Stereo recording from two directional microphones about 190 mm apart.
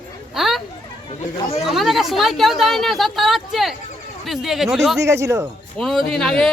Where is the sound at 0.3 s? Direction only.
Centre (ahead or behind).